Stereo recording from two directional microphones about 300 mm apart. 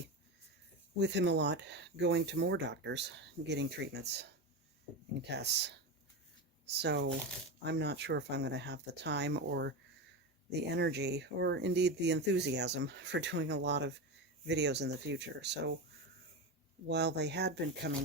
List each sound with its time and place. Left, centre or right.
0.9 s speech: right
16.9 s speech: right